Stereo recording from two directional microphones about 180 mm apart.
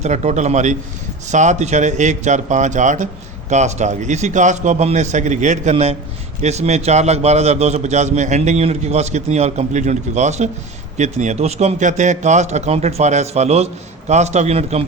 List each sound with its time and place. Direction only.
0.0 s a man's voice: 40° right (ahead or behind)